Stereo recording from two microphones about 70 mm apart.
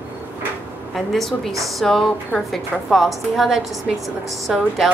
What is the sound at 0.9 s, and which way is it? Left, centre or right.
A woman's voice, centre.